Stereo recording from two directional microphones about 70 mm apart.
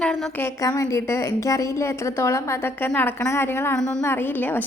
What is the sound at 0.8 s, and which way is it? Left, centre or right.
A woman's voice, left.